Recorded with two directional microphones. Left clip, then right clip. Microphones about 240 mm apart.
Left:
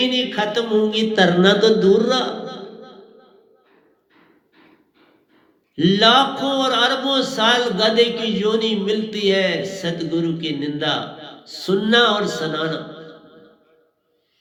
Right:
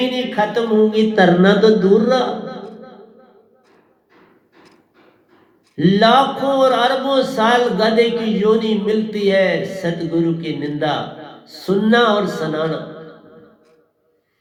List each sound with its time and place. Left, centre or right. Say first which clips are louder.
0.0 s speech: right 1 dB; left
5.7 s speech: right 2 dB; left